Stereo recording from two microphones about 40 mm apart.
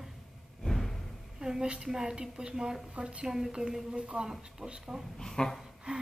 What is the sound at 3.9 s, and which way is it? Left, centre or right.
A woman's voice, right.